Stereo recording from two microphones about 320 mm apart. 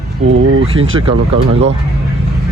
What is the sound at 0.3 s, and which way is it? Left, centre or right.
Speech, right.